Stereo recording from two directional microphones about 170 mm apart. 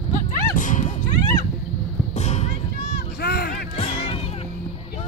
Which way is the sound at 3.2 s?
70° left (ahead or behind).